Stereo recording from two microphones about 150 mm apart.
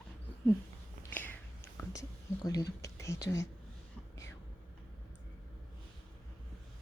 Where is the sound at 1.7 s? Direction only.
20° left (ahead or behind).